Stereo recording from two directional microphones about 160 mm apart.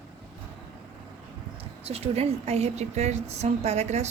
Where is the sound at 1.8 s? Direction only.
40° right (ahead or behind).